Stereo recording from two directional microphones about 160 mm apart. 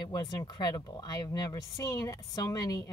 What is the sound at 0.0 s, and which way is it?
Speech, 25° left (ahead or behind).